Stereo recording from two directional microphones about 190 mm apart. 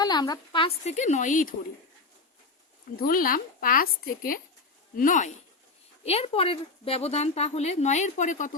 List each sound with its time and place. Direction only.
0.0 s a woman's voice: 20° left (ahead or behind); by 1.5 s 45° left (ahead or behind)
2.9 s speech: 50° left (ahead or behind)
6.1 s a woman's voice: 30° left (ahead or behind)